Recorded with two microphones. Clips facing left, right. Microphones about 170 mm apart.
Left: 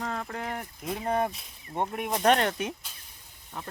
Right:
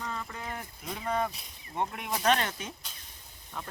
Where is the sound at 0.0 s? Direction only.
60° left (ahead or behind).